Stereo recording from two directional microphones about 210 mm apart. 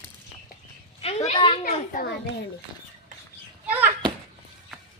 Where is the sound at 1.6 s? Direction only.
45° left (ahead or behind).